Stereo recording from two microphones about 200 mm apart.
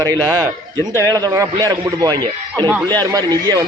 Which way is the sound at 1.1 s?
20° right (ahead or behind).